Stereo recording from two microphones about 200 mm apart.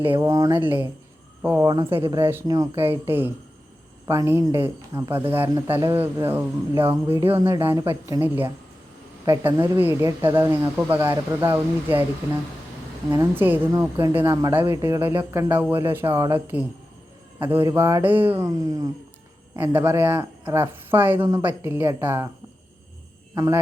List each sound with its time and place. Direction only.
0.1 s speech: 15° right (ahead or behind)
13.1 s speech: 10° right (ahead or behind)
23.3 s speech: 20° right (ahead or behind)